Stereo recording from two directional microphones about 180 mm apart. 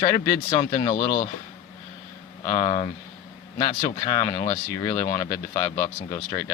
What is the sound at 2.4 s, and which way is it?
Speech, 25° left (ahead or behind).